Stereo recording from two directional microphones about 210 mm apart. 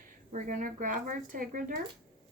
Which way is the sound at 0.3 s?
35° right (ahead or behind).